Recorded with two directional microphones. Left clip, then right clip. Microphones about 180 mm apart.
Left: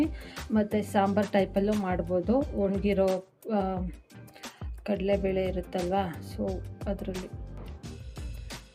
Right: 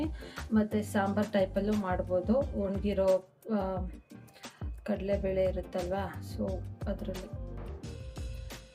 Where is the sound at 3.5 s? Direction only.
50° left (ahead or behind).